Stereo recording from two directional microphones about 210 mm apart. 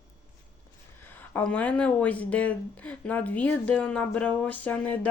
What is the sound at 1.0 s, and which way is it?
Speech, 10° left (ahead or behind).